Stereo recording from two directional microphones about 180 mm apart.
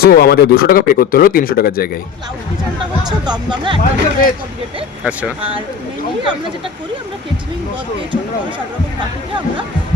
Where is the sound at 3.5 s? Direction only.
25° right (ahead or behind).